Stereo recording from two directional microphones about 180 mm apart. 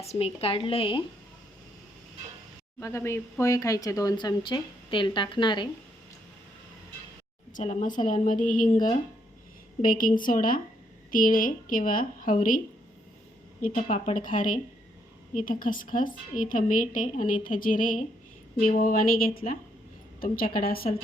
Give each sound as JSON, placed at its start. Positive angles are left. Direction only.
{"t": 0.0, "sound": "speech", "side_deg": 35}
{"t": 2.8, "sound": "speech", "side_deg": 15}
{"t": 7.5, "sound": "a woman's voice", "side_deg": 40}
{"t": 13.7, "sound": "a woman's voice", "side_deg": 40}